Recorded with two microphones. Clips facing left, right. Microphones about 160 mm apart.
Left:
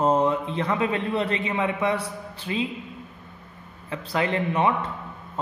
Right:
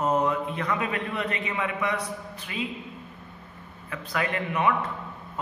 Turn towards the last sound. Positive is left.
turn(degrees=30)  # may be behind; listen again after turning